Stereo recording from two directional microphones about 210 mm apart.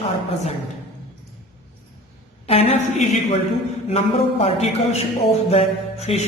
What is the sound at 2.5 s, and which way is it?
A man's voice, 30° left (ahead or behind).